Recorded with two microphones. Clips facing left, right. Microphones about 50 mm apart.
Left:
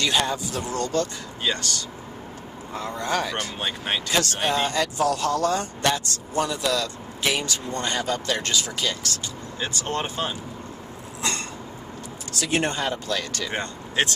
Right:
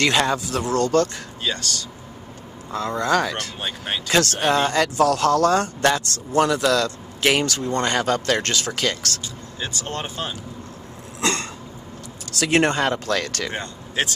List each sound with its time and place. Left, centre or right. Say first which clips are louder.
0.0 s speech: right 4 dB; right
1.4 s speech: even; centre
3.0 s speech: right 5 dB; right
3.6 s speech: left 1 dB; centre
4.1 s speech: right 6 dB; right
9.6 s speech: left 1 dB; centre
11.1 s a sound: right 5 dB; right
12.4 s speech: right 6 dB; right
13.6 s speech: left 4 dB; centre